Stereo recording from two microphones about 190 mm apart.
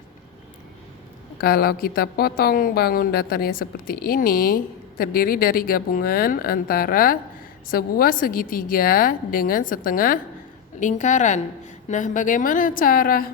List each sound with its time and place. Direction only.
1.4 s a woman's voice: 50° left (ahead or behind)